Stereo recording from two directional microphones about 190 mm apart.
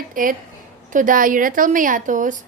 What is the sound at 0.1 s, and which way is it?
A woman's voice, 45° right (ahead or behind).